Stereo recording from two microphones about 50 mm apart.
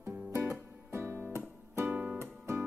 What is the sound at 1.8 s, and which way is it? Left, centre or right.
Music, right.